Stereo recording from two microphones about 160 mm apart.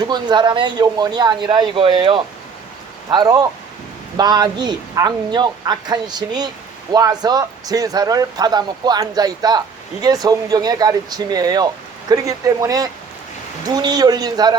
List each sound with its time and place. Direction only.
0.1 s speech: 30° right (ahead or behind)